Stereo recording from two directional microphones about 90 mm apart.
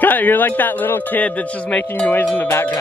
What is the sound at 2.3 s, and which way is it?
Cowbell, 25° left (ahead or behind).